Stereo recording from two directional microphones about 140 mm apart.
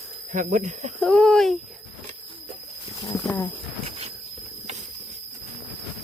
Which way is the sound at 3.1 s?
10° left (ahead or behind).